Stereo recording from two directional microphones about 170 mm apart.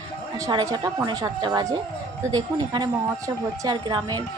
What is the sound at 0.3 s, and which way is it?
A woman's voice, 20° right (ahead or behind).